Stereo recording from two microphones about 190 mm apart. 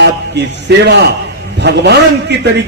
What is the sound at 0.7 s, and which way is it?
A man's voice, 60° right (ahead or behind).